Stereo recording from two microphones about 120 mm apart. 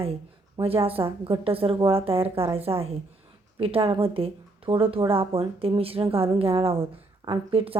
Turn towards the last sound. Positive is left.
turn(degrees=-50)  # may be behind; listen again after turning